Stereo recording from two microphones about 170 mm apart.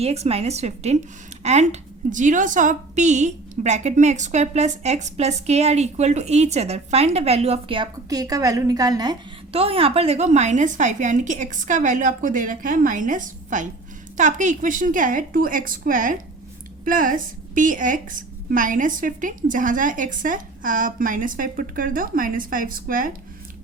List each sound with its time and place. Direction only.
0.0 s a woman's voice: 35° right (ahead or behind)
9.5 s a woman's voice: 35° right (ahead or behind); by 23.1 s 55° right (ahead or behind)